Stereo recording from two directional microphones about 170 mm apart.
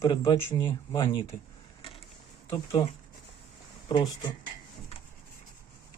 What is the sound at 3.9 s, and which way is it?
Speech, 25° left (ahead or behind).